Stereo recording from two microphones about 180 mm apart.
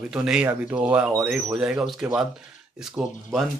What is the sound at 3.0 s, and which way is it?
Speech, 20° right (ahead or behind).